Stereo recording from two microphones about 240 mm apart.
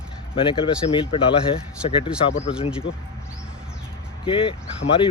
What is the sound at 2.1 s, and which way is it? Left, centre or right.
Speech, centre.